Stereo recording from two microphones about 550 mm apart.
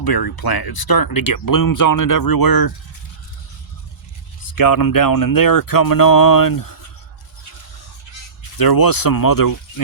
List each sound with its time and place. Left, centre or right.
0.0 s speech: left
4.4 s speech: left
8.5 s speech: left